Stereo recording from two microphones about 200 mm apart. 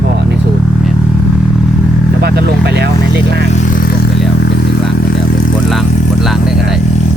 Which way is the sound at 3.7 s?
45° left (ahead or behind).